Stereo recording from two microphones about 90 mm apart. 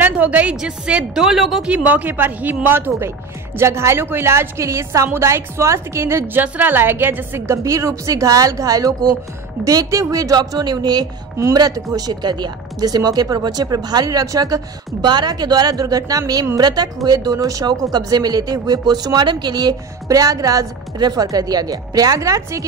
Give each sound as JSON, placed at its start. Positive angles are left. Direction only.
{"t": 0.0, "sound": "a woman's voice", "side_deg": -15}
{"t": 1.7, "sound": "a woman's voice", "side_deg": -15}